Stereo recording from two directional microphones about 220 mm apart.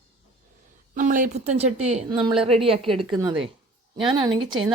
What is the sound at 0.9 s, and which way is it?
A woman's voice, 35° right (ahead or behind).